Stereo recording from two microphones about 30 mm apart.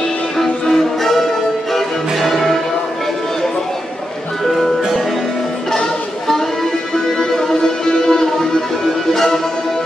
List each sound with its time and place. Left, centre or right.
0.4 s music: centre
5.7 s music: centre
7.8 s music: left